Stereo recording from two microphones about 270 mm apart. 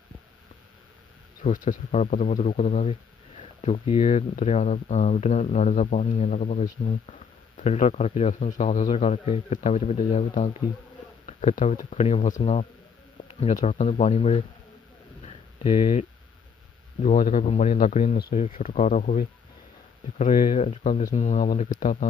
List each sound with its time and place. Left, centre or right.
1.5 s speech: left
15.2 s a sound: left
17.0 s speech: left